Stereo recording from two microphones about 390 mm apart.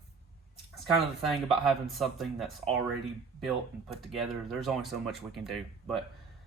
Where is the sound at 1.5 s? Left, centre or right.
Centre.